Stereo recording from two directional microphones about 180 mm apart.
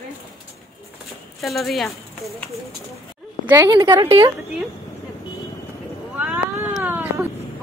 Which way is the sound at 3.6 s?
25° right (ahead or behind).